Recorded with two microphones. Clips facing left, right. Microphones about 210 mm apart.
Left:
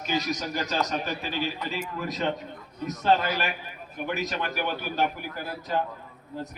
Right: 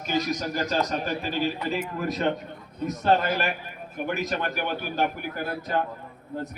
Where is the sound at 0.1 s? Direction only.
50° right (ahead or behind).